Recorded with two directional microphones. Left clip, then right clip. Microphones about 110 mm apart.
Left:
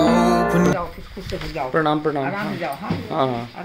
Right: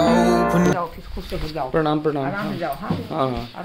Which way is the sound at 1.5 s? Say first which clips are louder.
Left 1 dB; 25° right (ahead or behind).